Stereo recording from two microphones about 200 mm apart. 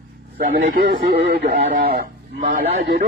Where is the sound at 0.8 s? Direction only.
55° right (ahead or behind).